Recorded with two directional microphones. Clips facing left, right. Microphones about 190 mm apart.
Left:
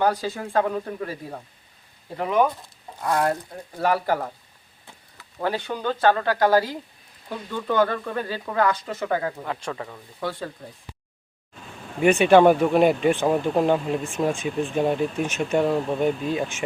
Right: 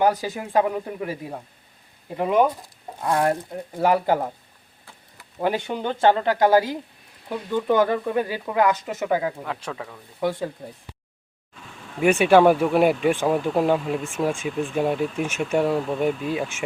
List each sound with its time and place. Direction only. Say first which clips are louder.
0.0 s speech: right 2 dB; 15° right (ahead or behind)
5.4 s speech: right 2 dB; 15° right (ahead or behind)
9.4 s speech: left 1 dB; centre (ahead or behind)
10.2 s speech: right 5 dB; 15° right (ahead or behind)
11.9 s speech: left 1 dB; 5° right (ahead or behind)